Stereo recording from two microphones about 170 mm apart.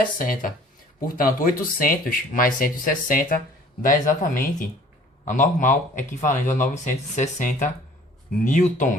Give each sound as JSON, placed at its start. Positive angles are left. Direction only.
{"t": 0.0, "sound": "a man's voice", "side_deg": 55}